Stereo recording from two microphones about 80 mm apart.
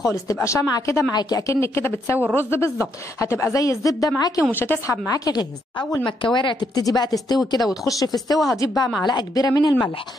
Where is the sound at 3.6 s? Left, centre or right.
Left.